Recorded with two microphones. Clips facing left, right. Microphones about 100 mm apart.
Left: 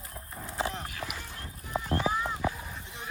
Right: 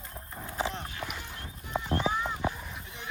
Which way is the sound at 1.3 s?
25° right (ahead or behind).